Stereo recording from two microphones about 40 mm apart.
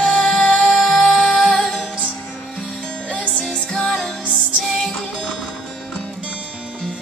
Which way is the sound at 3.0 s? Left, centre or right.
Left.